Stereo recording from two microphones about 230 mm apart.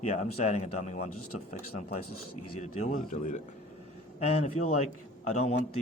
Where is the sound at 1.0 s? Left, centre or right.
Left.